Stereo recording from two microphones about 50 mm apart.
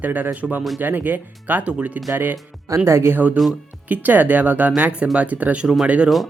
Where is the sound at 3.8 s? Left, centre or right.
Right.